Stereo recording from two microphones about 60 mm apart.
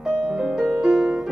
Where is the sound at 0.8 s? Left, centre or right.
Centre.